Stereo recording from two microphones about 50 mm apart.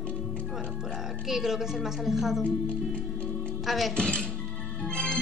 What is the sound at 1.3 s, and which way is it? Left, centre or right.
A woman's voice, centre.